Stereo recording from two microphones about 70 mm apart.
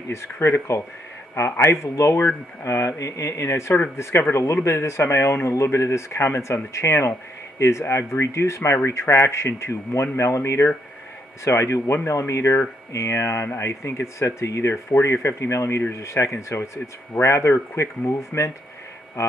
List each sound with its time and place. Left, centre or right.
0.1 s speech: left